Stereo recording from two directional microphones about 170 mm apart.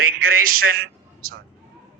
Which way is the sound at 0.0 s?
60° right (ahead or behind).